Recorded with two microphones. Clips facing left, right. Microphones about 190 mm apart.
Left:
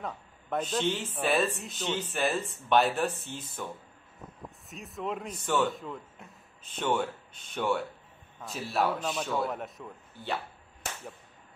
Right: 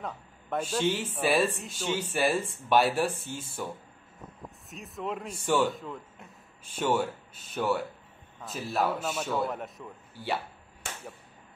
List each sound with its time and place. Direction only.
0.0 s a man's voice: centre (ahead or behind)